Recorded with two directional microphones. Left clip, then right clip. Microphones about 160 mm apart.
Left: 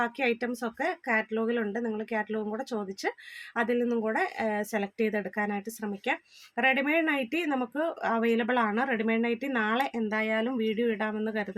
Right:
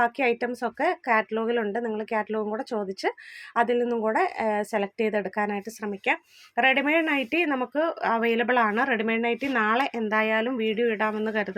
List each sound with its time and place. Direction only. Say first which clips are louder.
0.0 s a woman's voice: right 5 dB; 20° right (ahead or behind)